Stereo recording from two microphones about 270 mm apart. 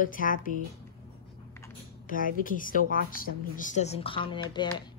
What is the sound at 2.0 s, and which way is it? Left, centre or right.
A woman's voice, left.